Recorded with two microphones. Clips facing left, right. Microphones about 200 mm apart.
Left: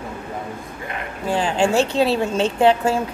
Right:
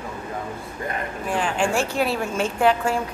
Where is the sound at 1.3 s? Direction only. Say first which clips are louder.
Left 4 dB; 25° left (ahead or behind).